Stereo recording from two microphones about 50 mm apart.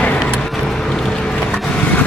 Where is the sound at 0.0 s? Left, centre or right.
Left.